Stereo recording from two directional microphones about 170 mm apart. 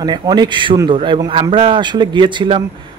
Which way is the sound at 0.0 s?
25° right (ahead or behind).